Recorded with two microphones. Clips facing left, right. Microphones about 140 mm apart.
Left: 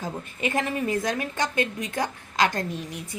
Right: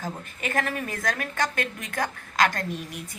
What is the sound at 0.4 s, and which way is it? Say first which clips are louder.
A woman's voice: left 3 dB; 20° left (ahead or behind).